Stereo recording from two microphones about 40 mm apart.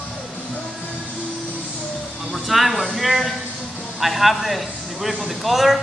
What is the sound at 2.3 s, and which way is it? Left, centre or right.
A man's voice, centre.